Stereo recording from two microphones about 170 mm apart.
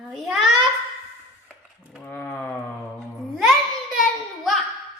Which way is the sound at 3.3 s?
Centre (ahead or behind).